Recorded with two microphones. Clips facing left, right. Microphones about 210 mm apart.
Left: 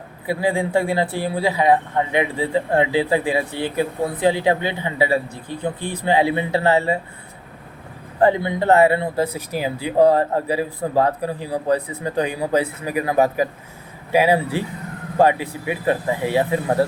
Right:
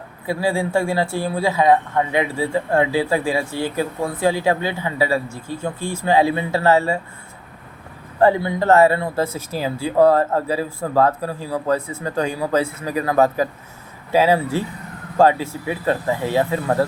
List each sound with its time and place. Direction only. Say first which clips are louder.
0.3 s speech: even; 20° left (ahead or behind)
8.2 s speech: right 1 dB; 20° left (ahead or behind)